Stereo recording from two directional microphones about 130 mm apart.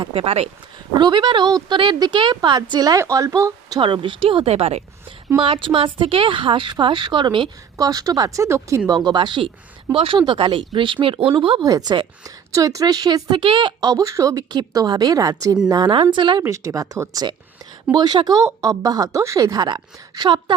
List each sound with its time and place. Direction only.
0.0 s speech: 45° right (ahead or behind)
0.9 s speech: 35° right (ahead or behind)
3.8 s speech: 40° right (ahead or behind)
5.4 s a woman's voice: 40° right (ahead or behind); by 8.8 s 20° right (ahead or behind)
8.9 s speech: 35° right (ahead or behind)
11.6 s a woman's voice: 30° right (ahead or behind)
16.4 s a woman's voice: 25° right (ahead or behind)